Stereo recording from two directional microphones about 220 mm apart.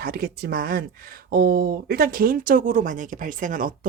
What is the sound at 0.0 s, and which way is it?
Speech, 45° right (ahead or behind).